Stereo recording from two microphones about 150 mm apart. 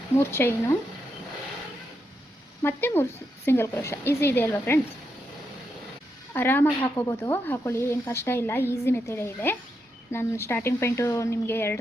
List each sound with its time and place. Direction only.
0.2 s a woman's voice: 15° left (ahead or behind)
2.6 s a woman's voice: 15° left (ahead or behind)
6.3 s a woman's voice: 15° left (ahead or behind)